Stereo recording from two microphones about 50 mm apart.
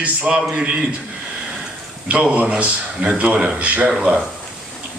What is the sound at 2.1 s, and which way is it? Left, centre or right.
A man's voice, right.